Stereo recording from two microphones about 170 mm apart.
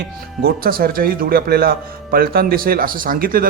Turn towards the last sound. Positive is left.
turn(degrees=-55)  # may be behind; listen again after turning